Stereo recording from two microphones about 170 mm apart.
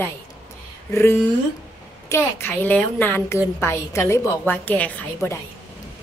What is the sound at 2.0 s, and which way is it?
A woman's voice, 15° left (ahead or behind).